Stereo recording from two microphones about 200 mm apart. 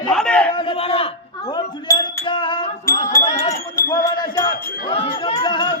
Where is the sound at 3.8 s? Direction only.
20° left (ahead or behind).